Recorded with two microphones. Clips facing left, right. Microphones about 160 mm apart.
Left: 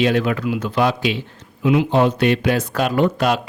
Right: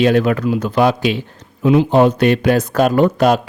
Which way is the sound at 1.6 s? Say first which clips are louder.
Right 4 dB; 35° right (ahead or behind).